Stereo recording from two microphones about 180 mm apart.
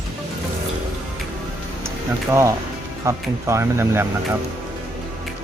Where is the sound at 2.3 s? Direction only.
15° right (ahead or behind).